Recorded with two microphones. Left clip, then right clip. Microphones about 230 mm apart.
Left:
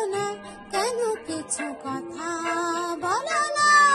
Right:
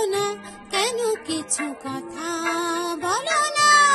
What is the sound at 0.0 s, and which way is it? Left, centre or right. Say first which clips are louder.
Music: right 4 dB; right.